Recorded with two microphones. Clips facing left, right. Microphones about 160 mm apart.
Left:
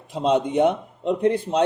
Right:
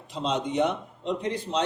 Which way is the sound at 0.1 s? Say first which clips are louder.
Left 7 dB; 55° left (ahead or behind).